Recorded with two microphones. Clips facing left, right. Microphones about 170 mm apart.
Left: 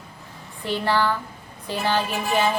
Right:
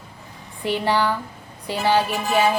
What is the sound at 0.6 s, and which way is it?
A woman's voice, 15° right (ahead or behind).